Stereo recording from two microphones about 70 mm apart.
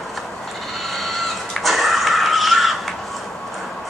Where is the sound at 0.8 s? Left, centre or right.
Centre.